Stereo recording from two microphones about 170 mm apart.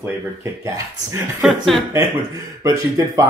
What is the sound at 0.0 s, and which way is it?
Speech, 15° right (ahead or behind).